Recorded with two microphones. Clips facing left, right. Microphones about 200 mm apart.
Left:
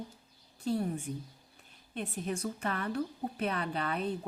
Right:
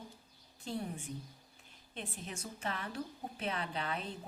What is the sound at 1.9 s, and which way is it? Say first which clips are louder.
Speech: left 9 dB; 60° left (ahead or behind).